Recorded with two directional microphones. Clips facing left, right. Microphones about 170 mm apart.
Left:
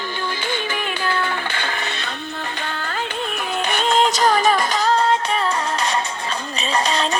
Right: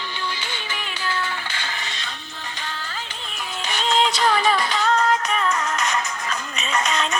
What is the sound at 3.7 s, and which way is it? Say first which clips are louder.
Music: left 2 dB; 55° left (ahead or behind).